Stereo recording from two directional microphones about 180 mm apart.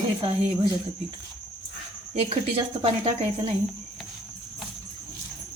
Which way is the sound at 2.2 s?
35° right (ahead or behind).